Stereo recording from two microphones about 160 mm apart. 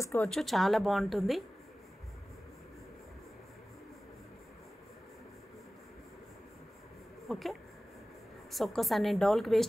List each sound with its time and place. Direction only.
0.0 s speech: 15° left (ahead or behind)
0.3 s a woman's voice: centre (ahead or behind)
7.2 s a woman's voice: centre (ahead or behind)